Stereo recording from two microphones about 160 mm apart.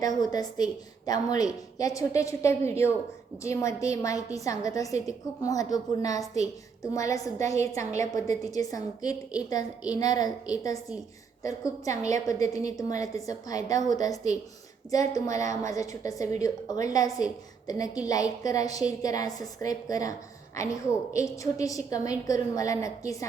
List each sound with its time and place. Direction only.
0.0 s a woman's voice: 25° left (ahead or behind)